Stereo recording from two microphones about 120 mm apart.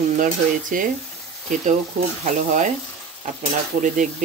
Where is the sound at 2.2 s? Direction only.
90° right.